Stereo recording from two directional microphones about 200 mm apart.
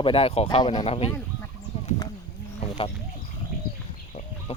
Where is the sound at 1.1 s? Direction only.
10° left (ahead or behind).